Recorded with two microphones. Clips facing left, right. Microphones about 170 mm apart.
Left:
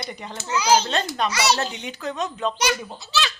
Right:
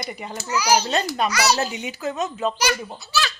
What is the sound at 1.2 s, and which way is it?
Speech, 25° left (ahead or behind).